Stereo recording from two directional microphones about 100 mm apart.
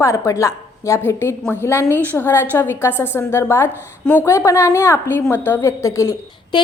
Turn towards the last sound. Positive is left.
turn(degrees=50)  # may be behind; listen again after turning